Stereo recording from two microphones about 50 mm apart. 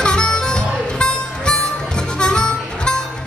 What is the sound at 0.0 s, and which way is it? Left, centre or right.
Harmonica, centre.